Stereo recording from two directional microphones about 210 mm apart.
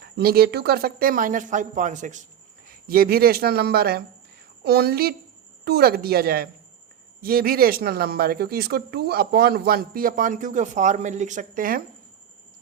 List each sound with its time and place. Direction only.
0.2 s speech: 45° right (ahead or behind)